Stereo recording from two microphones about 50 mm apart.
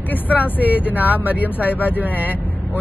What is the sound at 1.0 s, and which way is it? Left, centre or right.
Speech, right.